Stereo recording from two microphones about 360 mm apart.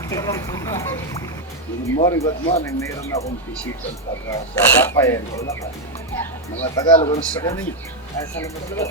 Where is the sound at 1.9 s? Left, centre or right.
Centre.